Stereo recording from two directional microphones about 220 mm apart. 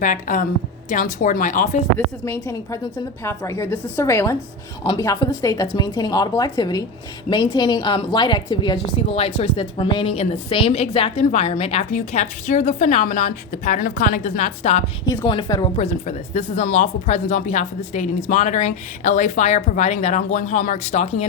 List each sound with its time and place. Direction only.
0.0 s a woman's voice: 35° left (ahead or behind)
2.2 s a woman's voice: 10° left (ahead or behind); by 14.8 s 30° left (ahead or behind)
15.0 s a woman's voice: 20° left (ahead or behind)
15.7 s a woman's voice: 30° left (ahead or behind)